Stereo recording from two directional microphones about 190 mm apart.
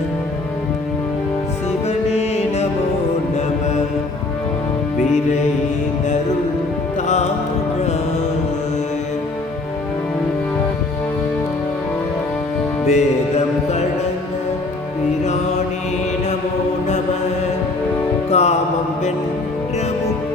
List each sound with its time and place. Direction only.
1.9 s music: 35° left (ahead or behind)
4.9 s music: 40° left (ahead or behind)
12.8 s music: 35° left (ahead or behind)
18.3 s music: 35° left (ahead or behind)